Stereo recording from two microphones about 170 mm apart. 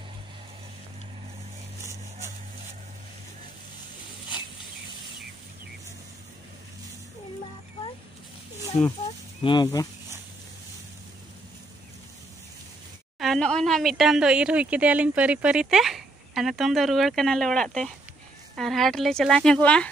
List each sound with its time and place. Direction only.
9.4 s speech: 25° left (ahead or behind)
13.2 s a woman's voice: 5° left (ahead or behind)